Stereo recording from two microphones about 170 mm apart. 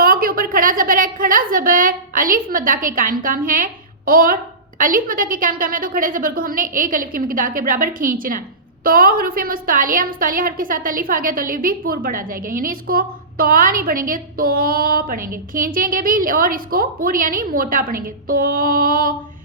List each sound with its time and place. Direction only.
0.0 s a woman's voice: 60° right (ahead or behind)